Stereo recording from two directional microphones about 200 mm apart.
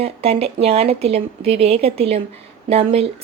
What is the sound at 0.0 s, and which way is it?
Speech, 30° right (ahead or behind).